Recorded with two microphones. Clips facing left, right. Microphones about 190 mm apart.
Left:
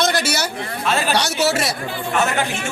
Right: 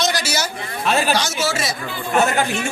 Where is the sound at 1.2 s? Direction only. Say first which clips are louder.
Left 3 dB; 65° left (ahead or behind).